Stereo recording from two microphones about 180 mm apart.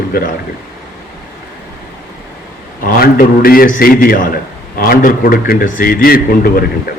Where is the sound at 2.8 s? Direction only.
55° left (ahead or behind).